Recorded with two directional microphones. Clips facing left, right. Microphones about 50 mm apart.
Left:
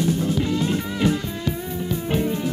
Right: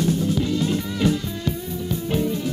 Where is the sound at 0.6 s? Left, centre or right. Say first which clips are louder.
Even; left.